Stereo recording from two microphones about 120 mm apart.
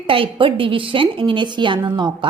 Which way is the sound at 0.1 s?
45° right (ahead or behind).